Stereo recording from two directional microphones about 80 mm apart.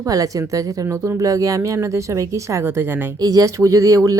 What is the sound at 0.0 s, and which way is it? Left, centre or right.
Speech, right.